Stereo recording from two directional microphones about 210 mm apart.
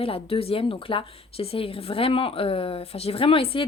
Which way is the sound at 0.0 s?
25° left (ahead or behind).